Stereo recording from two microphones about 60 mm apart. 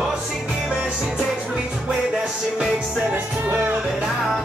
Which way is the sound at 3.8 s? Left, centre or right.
Centre.